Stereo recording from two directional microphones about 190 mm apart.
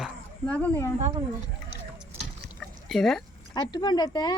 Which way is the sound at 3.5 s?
20° left (ahead or behind).